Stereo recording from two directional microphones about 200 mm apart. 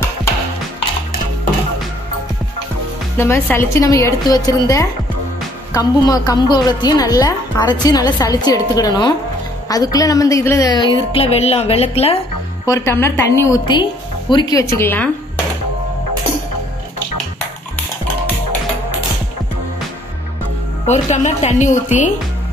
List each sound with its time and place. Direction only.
3.2 s a woman's voice: 10° left (ahead or behind); by 12.2 s 30° left (ahead or behind)
12.6 s a woman's voice: 15° left (ahead or behind)
20.8 s a woman's voice: 35° left (ahead or behind)